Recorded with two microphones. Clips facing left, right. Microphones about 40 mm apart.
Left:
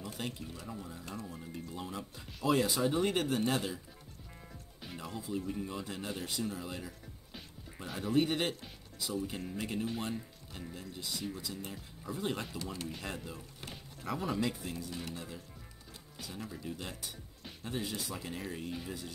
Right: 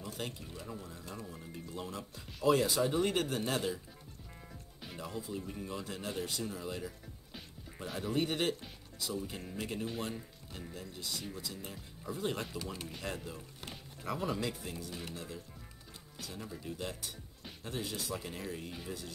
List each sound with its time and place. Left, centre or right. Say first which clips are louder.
0.2 s speech: left 2 dB; centre
0.8 s speech: left 2 dB; left
1.1 s speech: left 3 dB; centre
4.8 s speech: even; centre